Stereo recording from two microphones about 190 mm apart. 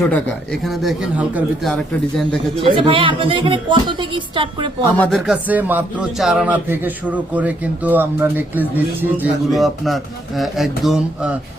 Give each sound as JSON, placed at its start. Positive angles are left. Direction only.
{"t": 0.1, "sound": "speech", "side_deg": 0}
{"t": 2.6, "sound": "a woman's voice", "side_deg": -25}
{"t": 4.9, "sound": "speech", "side_deg": 0}